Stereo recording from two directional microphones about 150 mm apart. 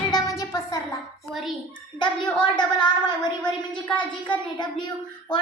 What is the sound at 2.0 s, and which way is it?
A woman's voice, 30° left (ahead or behind).